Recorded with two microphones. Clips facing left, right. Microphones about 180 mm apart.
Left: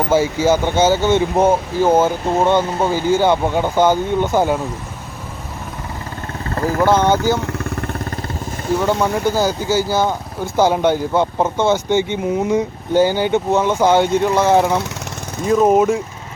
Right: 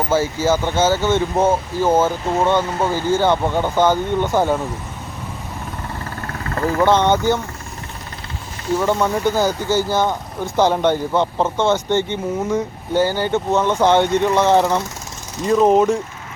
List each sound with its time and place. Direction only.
0.1 s speech: 15° left (ahead or behind)
6.4 s vehicle: 30° left (ahead or behind)
6.7 s speech: 5° left (ahead or behind)
7.4 s vehicle: 65° left (ahead or behind)
9.0 s speech: 5° left (ahead or behind)